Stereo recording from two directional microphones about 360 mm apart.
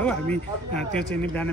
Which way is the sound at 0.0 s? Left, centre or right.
Centre.